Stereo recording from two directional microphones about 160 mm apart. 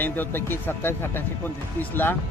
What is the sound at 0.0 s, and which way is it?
Speech, 10° left (ahead or behind).